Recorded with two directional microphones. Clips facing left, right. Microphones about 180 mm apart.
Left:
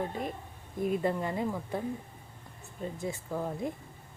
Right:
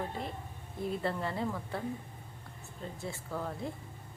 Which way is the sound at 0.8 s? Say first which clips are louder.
Left 5 dB; 15° left (ahead or behind).